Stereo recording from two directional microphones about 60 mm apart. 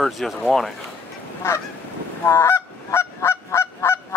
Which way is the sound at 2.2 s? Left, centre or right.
Left.